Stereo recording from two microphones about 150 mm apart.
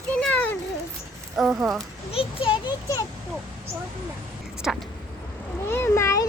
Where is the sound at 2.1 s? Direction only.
35° left (ahead or behind).